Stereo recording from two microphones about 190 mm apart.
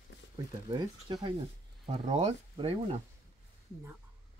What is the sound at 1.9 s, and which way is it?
Speech, 35° right (ahead or behind).